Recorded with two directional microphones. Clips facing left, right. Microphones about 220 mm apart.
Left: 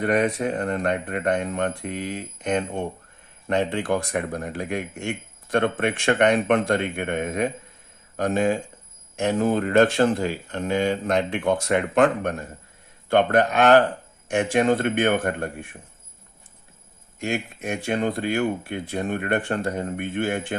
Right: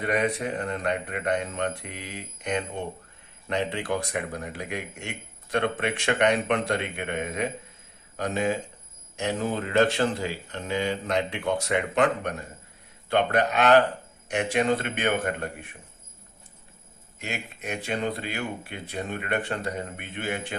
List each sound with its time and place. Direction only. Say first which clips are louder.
0.0 s speech: left 4 dB; 50° left (ahead or behind)
17.2 s speech: left 8 dB; 50° left (ahead or behind)